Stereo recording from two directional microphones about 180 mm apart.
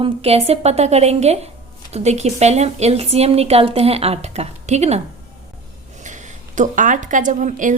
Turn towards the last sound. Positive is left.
turn(degrees=-45)  # may be behind; listen again after turning